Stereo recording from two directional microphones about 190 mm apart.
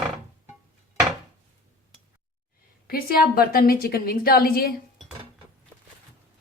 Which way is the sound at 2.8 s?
50° left (ahead or behind).